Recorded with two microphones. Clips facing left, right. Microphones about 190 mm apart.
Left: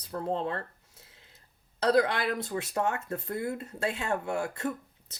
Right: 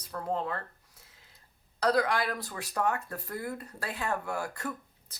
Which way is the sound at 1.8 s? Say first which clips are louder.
Left 2 dB; 25° left (ahead or behind).